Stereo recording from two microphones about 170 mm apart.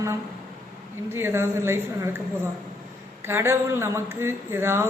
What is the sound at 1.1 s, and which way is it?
Speech, 15° right (ahead or behind).